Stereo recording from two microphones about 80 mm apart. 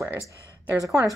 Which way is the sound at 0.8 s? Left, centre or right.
Right.